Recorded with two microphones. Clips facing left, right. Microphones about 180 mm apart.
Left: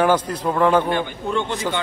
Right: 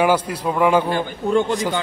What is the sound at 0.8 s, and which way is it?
Speech, 40° right (ahead or behind).